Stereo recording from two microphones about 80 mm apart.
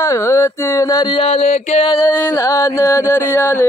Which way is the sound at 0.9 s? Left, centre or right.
Left.